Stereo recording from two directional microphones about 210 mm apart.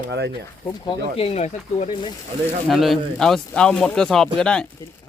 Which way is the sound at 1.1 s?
30° left (ahead or behind).